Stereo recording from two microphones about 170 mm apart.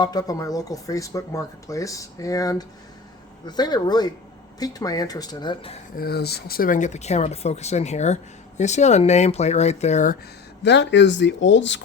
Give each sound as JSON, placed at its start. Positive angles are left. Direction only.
{"t": 0.0, "sound": "speech", "side_deg": 25}
{"t": 6.0, "sound": "speech", "side_deg": 70}
{"t": 10.6, "sound": "speech", "side_deg": 90}